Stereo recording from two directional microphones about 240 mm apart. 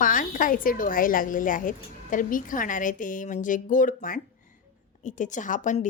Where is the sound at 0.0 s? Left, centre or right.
Left.